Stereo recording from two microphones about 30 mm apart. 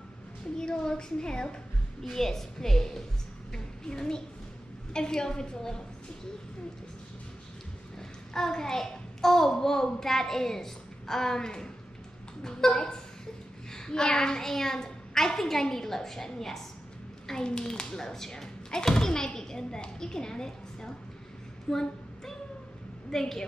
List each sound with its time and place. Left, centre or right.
0.6 s speech: left
2.1 s a child's voice: centre
8.3 s a child's voice: left
14.4 s a child's voice: centre
17.5 s speech: left
21.6 s a sound: centre
23.1 s a child's voice: centre